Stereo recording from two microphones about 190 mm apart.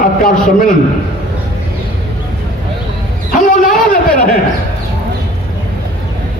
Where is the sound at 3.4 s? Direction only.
45° left (ahead or behind).